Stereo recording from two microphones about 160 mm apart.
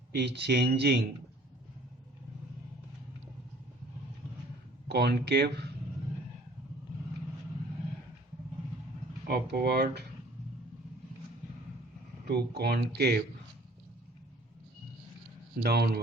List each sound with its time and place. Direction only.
0.1 s speech: 90° right
4.9 s speech: 85° right
9.2 s speech: 80° right
12.2 s speech: 90° right
15.6 s a man's voice: 80° right